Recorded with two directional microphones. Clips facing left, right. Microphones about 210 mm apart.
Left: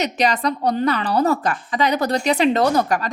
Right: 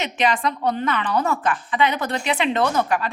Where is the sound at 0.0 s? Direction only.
40° left (ahead or behind).